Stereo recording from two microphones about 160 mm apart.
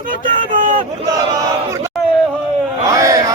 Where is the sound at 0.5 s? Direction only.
55° right (ahead or behind).